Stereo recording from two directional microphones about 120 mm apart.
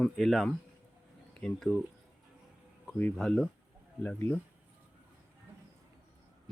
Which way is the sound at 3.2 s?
Centre (ahead or behind).